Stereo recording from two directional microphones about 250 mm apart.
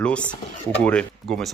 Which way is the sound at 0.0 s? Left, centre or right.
Centre.